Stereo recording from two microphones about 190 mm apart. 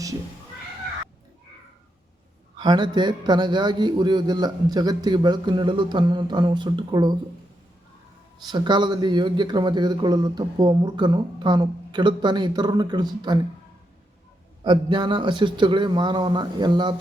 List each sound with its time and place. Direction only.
2.6 s a man's voice: 25° right (ahead or behind)
8.4 s a man's voice: 25° right (ahead or behind)
14.6 s a man's voice: 25° right (ahead or behind)